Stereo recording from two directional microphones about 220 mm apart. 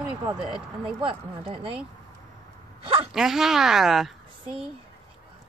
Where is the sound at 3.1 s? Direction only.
Centre (ahead or behind).